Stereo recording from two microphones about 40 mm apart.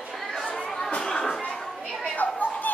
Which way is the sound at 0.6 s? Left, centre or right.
Centre.